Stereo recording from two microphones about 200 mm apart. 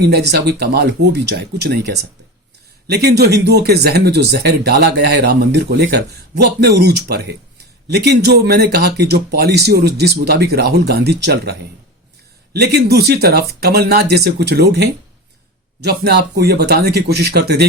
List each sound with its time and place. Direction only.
0.0 s speech: 55° right (ahead or behind)
12.5 s speech: 55° right (ahead or behind)